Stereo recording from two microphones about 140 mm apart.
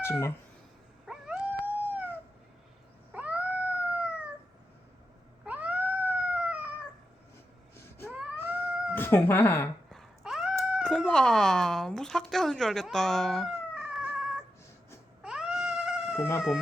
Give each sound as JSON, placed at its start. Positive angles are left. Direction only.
{"t": 0.0, "sound": "cat", "side_deg": 20}
{"t": 1.0, "sound": "dog", "side_deg": -5}
{"t": 3.1, "sound": "cat", "side_deg": -10}
{"t": 5.5, "sound": "cat", "side_deg": -10}
{"t": 8.9, "sound": "speech", "side_deg": 15}
{"t": 9.9, "sound": "cat", "side_deg": 0}
{"t": 10.8, "sound": "speech", "side_deg": 5}
{"t": 15.2, "sound": "cat", "side_deg": -5}
{"t": 16.1, "sound": "speech", "side_deg": 15}